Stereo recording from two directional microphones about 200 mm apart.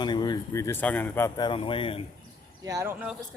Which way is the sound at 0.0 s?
20° left (ahead or behind).